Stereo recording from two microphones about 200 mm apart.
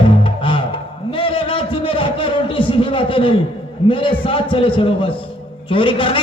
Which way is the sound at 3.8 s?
25° left (ahead or behind).